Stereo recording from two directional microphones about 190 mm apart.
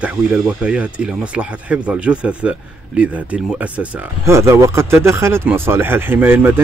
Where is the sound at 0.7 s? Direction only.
5° right (ahead or behind).